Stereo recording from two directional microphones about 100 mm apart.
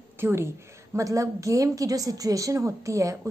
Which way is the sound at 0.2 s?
25° right (ahead or behind).